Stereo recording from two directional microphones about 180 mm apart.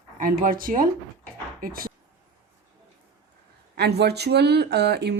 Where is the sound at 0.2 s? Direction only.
50° right (ahead or behind).